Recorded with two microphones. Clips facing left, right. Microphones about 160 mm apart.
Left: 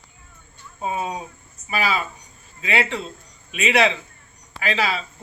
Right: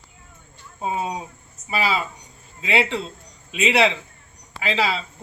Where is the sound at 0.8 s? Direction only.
25° right (ahead or behind).